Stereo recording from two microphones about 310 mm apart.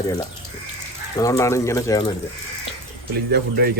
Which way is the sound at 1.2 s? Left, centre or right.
Centre.